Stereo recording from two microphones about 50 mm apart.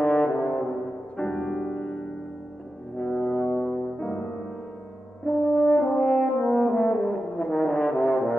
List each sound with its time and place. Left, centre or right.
0.0 s brass instrument: centre
1.1 s music: centre
3.0 s brass instrument: centre
5.2 s french horn: centre